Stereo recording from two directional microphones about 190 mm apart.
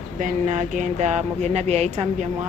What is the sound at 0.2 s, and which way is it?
Speech, 40° right (ahead or behind).